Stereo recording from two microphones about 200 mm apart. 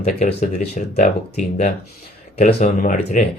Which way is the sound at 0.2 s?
35° left (ahead or behind).